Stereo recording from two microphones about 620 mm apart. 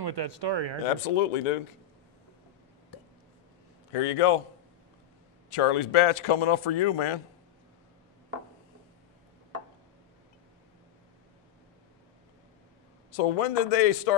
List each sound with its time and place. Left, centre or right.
0.0 s speech: right
0.8 s speech: left
3.9 s a man's voice: left
5.5 s speech: left
13.1 s a man's voice: left